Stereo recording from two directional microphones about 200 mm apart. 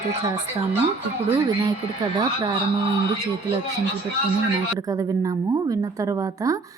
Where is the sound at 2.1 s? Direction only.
25° right (ahead or behind).